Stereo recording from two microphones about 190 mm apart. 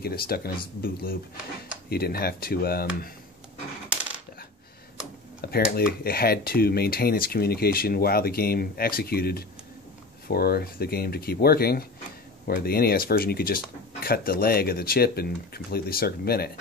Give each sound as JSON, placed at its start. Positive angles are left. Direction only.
{"t": 0.0, "sound": "speech", "side_deg": 55}
{"t": 1.9, "sound": "speech", "side_deg": 55}
{"t": 3.9, "sound": "coin", "side_deg": -5}
{"t": 5.5, "sound": "speech", "side_deg": 55}